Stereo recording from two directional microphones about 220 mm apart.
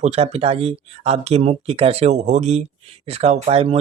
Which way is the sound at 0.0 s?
30° right (ahead or behind).